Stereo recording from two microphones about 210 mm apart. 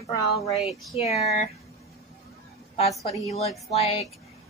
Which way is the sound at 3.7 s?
30° left (ahead or behind).